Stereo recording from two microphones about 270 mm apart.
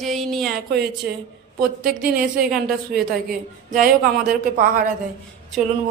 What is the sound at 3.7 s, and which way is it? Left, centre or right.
Speech, right.